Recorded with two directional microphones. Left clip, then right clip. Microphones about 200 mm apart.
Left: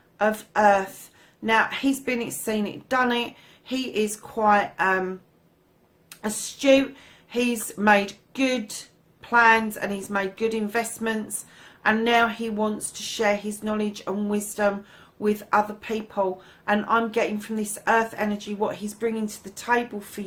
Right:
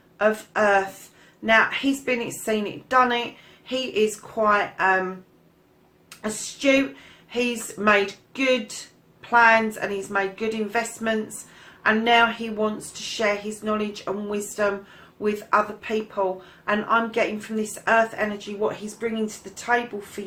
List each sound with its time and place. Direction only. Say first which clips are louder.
0.2 s a woman's voice: even; 40° left (ahead or behind)
6.1 s a woman's voice: even; 40° left (ahead or behind)